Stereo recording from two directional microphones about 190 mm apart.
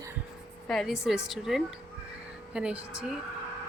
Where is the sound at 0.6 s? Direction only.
Centre (ahead or behind).